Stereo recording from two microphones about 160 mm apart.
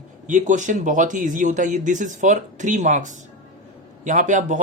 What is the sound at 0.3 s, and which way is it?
Speech, 50° right (ahead or behind).